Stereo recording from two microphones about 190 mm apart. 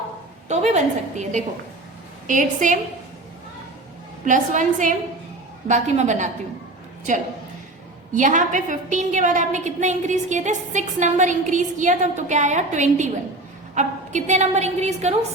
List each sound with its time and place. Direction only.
0.4 s a woman's voice: 35° right (ahead or behind)
4.3 s a woman's voice: 40° right (ahead or behind)
8.1 s a woman's voice: 40° right (ahead or behind)